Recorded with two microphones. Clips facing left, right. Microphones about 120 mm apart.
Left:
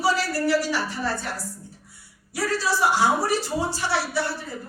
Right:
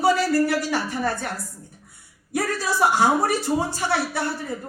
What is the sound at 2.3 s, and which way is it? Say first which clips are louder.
A man's voice: even; 50° right (ahead or behind).